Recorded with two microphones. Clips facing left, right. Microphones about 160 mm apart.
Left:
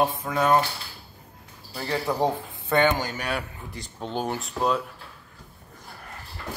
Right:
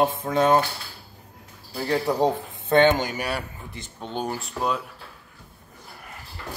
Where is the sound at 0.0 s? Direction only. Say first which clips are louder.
Right 3 dB; 25° right (ahead or behind).